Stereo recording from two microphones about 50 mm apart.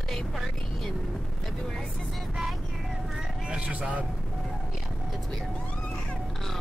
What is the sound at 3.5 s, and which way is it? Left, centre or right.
Speech, right.